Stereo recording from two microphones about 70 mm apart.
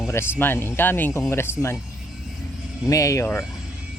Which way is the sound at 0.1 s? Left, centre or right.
Left.